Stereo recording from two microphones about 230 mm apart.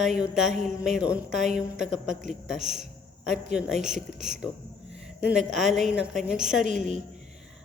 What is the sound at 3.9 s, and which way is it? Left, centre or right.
Speech, right.